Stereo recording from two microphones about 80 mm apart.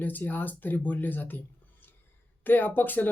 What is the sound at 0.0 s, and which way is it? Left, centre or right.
Speech, left.